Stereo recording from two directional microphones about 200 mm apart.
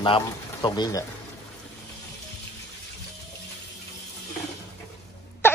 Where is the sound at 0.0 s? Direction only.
25° left (ahead or behind).